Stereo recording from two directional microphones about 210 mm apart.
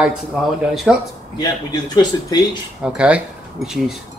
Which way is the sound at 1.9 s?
20° left (ahead or behind).